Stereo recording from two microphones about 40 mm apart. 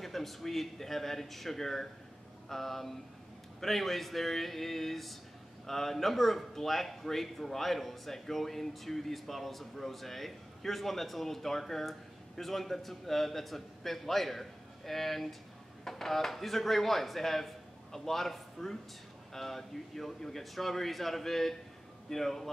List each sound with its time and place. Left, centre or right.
0.0 s a man's voice: centre